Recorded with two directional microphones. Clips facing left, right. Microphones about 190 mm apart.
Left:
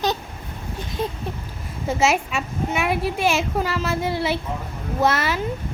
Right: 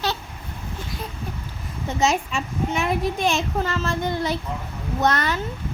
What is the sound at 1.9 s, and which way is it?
A child's voice, 5° left (ahead or behind).